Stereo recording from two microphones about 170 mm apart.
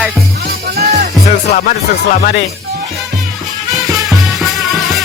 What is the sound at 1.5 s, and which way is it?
Speech, 50° left (ahead or behind).